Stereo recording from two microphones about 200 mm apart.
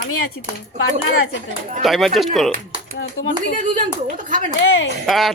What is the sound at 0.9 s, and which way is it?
Speech, 80° left.